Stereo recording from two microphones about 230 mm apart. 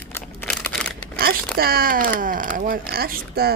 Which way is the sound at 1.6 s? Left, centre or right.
Right.